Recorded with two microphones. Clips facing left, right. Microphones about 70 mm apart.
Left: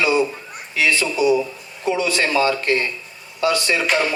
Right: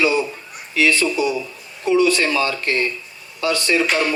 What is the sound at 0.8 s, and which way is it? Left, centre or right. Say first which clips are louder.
A man's voice: right 1 dB; left.